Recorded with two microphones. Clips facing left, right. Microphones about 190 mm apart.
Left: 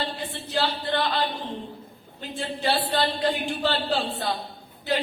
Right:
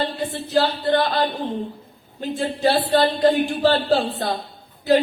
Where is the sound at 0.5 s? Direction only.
45° right (ahead or behind).